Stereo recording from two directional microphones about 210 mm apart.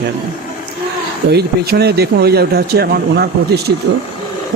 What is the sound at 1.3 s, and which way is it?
Speech, 50° right (ahead or behind).